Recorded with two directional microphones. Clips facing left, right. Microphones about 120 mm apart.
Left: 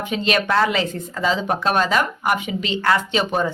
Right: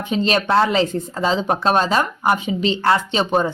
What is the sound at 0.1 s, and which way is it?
Speech, 30° right (ahead or behind).